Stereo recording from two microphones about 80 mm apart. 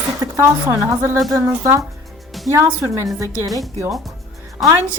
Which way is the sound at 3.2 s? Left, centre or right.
Right.